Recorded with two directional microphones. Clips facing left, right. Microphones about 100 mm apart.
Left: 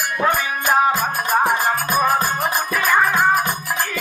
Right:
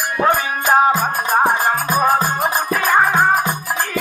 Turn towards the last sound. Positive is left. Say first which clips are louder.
# right 2 dB
turn(degrees=-30)  # may be behind; listen again after turning